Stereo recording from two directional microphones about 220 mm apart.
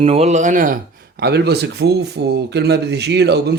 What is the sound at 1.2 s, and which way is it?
Speech, 50° right (ahead or behind).